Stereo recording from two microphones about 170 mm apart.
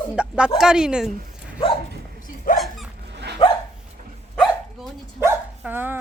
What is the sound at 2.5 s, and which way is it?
Dog, centre (ahead or behind).